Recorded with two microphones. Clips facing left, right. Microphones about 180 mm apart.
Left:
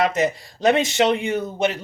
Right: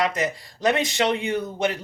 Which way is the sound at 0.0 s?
25° left (ahead or behind).